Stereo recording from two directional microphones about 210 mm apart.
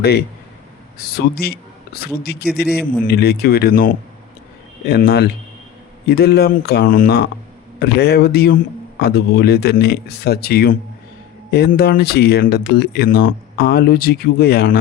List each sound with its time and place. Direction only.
0.9 s speech: 45° left (ahead or behind)